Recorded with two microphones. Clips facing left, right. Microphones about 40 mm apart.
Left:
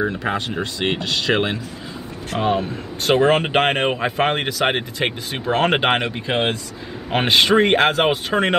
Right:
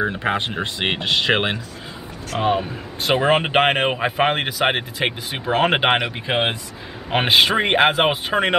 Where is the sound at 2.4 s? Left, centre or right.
Centre.